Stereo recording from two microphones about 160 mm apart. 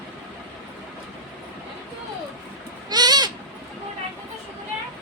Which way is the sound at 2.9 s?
25° right (ahead or behind).